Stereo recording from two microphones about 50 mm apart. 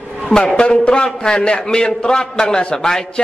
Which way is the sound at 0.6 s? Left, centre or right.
Centre.